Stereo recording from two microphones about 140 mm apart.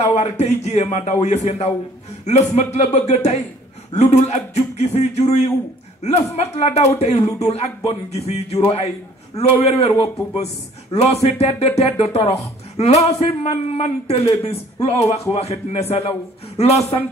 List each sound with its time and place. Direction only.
0.0 s a man's voice: 50° left (ahead or behind)